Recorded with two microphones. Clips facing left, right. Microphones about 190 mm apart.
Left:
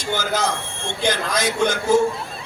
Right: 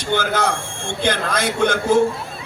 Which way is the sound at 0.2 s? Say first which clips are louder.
Right 2 dB; 60° right (ahead or behind).